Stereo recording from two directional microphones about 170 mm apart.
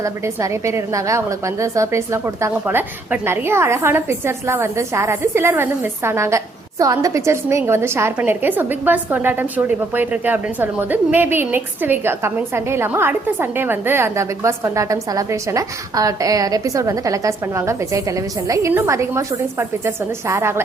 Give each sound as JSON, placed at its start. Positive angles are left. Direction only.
{"t": 0.0, "sound": "a woman's voice", "side_deg": -15}